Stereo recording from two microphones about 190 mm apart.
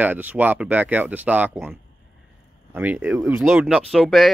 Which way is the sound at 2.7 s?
10° right (ahead or behind).